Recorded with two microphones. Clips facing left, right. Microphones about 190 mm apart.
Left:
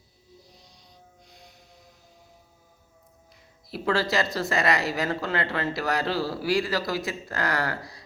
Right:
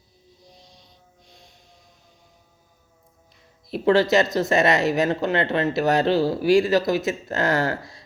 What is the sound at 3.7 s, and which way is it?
Speech, 20° right (ahead or behind).